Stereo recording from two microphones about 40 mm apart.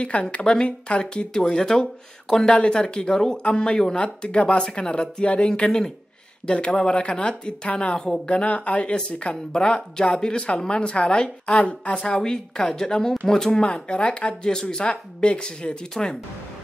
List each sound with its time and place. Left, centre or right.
0.0 s a woman's voice: left
8.9 s speech: left
12.1 s a woman's voice: centre
14.5 s a woman's voice: centre